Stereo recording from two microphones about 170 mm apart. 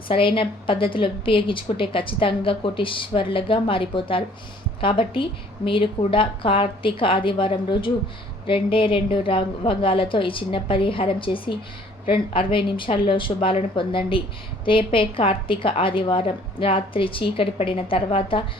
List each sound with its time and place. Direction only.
0.1 s a woman's voice: 30° left (ahead or behind)